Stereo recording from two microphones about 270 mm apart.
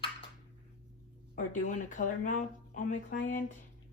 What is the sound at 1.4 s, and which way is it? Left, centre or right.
Speech, left.